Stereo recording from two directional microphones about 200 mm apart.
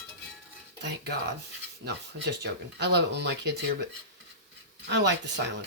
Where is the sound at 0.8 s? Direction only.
60° right (ahead or behind).